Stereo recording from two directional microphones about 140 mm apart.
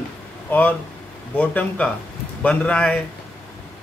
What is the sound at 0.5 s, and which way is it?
Speech, 10° left (ahead or behind).